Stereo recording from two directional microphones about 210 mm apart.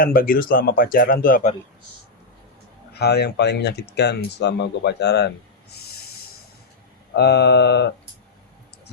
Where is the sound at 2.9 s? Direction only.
50° left (ahead or behind).